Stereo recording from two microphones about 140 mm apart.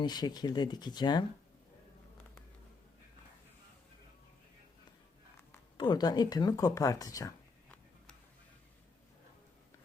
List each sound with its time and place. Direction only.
0.0 s speech: 30° left (ahead or behind)
5.7 s speech: 35° left (ahead or behind)